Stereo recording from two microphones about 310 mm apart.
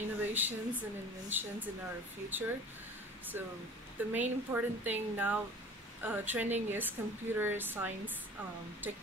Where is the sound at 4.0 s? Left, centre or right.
Centre.